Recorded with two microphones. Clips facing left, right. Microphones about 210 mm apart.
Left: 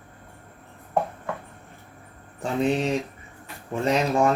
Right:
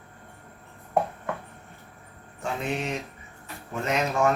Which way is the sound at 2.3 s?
35° left (ahead or behind).